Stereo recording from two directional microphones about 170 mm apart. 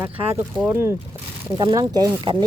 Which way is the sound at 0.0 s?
15° right (ahead or behind).